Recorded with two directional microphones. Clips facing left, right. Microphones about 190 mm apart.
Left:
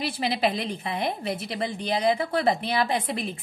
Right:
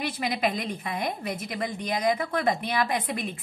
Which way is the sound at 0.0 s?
30° left (ahead or behind).